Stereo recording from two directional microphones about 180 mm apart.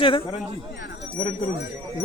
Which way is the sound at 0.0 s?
30° left (ahead or behind).